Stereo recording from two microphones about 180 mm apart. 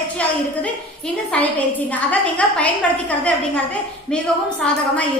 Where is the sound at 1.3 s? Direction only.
10° left (ahead or behind).